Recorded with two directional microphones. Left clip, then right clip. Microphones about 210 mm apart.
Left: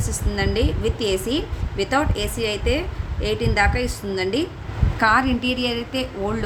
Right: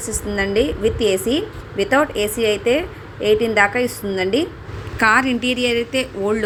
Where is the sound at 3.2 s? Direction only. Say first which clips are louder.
Right 8 dB; 30° left (ahead or behind).